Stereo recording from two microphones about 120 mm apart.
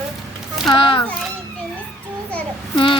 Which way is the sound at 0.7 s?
45° left (ahead or behind).